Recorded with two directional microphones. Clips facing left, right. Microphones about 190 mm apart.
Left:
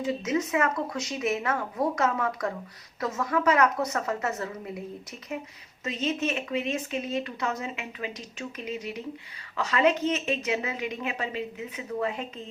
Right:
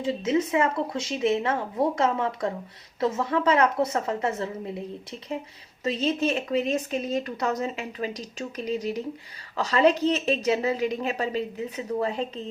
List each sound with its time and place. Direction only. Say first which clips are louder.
0.0 s speech: right 3 dB; 30° right (ahead or behind)